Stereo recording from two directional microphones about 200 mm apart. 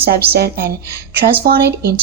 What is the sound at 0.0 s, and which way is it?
Speech, 50° right (ahead or behind).